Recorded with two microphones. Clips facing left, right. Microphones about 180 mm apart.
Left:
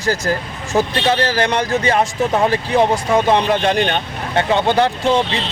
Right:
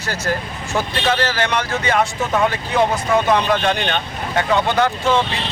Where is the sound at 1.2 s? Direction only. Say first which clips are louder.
Left 3 dB; 35° left (ahead or behind).